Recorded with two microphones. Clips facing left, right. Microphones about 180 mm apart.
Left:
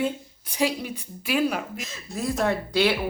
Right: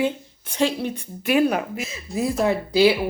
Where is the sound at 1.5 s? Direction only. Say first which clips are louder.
Right 5 dB; 5° right (ahead or behind).